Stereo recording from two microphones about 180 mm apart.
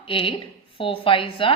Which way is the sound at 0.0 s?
30° left (ahead or behind).